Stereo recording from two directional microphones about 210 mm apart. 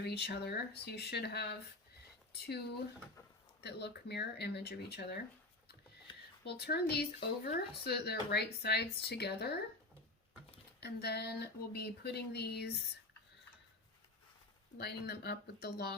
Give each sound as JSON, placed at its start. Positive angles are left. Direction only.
{"t": 0.0, "sound": "speech", "side_deg": 50}
{"t": 3.6, "sound": "speech", "side_deg": 50}
{"t": 6.1, "sound": "a sound", "side_deg": 20}
{"t": 6.4, "sound": "speech", "side_deg": 50}
{"t": 10.8, "sound": "speech", "side_deg": 50}
{"t": 14.8, "sound": "speech", "side_deg": 50}